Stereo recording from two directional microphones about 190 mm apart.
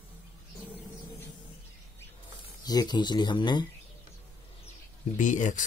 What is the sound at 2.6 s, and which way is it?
Speech, 20° left (ahead or behind).